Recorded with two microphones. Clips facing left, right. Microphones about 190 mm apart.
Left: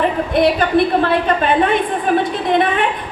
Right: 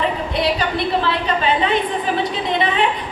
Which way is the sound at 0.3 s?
50° left (ahead or behind).